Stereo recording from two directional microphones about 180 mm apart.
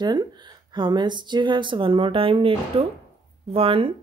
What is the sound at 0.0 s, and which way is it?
Speech, 25° right (ahead or behind).